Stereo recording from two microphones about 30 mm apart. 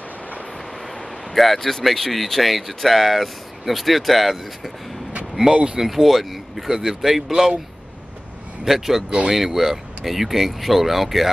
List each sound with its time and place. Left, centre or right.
1.3 s speech: centre
5.5 s speech: right
5.9 s speech: centre
6.7 s speech: centre
7.0 s speech: centre
8.6 s speech: centre